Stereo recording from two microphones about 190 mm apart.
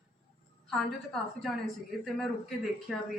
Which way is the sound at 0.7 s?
Centre (ahead or behind).